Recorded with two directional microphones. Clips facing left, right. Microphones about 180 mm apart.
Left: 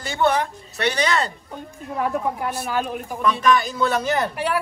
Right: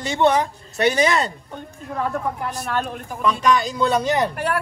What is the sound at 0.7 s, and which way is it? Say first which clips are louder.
Speech: right 4 dB; 20° right (ahead or behind).